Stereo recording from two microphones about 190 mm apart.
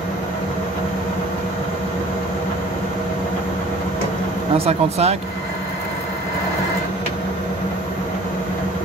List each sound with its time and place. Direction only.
4.6 s speech: 30° right (ahead or behind)